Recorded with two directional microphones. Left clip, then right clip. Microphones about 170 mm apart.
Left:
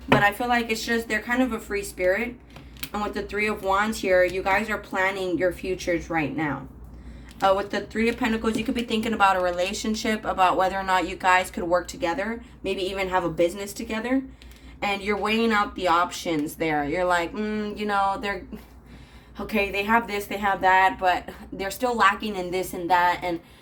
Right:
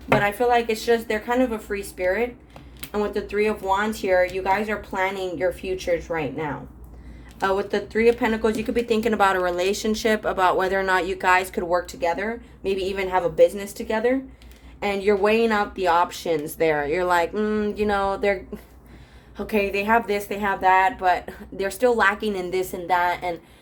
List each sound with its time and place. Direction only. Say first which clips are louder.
0.2 s a woman's voice: right 2 dB; 35° right (ahead or behind)
19.4 s a woman's voice: right 2 dB; 35° right (ahead or behind)